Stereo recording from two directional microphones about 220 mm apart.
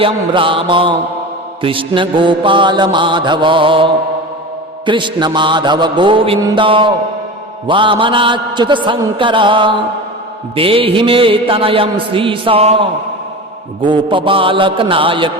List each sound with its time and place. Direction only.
0.0 s music: 25° right (ahead or behind)